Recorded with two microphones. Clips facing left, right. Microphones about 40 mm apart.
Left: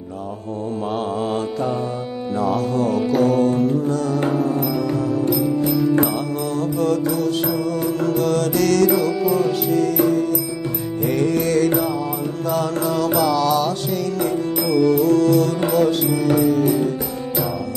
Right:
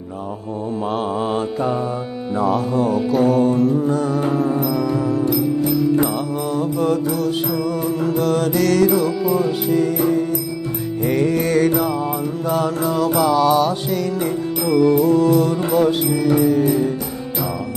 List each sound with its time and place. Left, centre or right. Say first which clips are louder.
1.3 s mantra: right 2 dB; centre
2.3 s music: right 2 dB; centre
3.8 s music: right 2 dB; centre
4.6 s music: right 1 dB; centre
6.5 s music: right 1 dB; centre
11.1 s music: right 1 dB; centre